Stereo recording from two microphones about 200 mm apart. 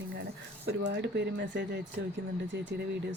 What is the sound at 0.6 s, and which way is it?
Speech, 60° right (ahead or behind).